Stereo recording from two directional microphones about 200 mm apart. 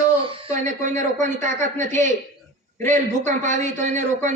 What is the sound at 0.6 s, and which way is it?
A man's voice, 40° right (ahead or behind).